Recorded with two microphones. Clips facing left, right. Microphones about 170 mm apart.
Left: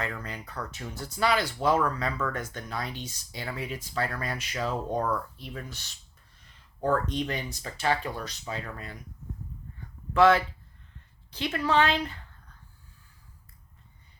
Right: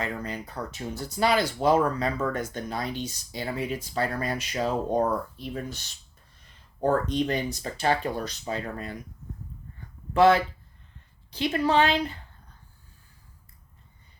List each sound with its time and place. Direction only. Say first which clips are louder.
0.0 s speech: right 3 dB; 25° right (ahead or behind)
6.8 s speech: right 3 dB; 40° right (ahead or behind)
10.2 s speech: right 2 dB; 35° right (ahead or behind)